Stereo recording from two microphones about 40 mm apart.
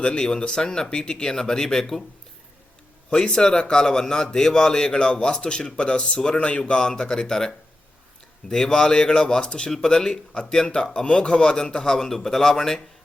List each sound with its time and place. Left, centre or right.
0.0 s speech: left
3.1 s a man's voice: centre